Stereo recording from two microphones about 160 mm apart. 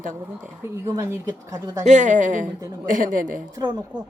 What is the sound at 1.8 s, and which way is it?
A woman's voice, 50° right (ahead or behind).